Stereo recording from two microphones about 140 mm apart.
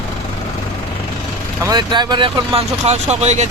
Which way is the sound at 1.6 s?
30° right (ahead or behind).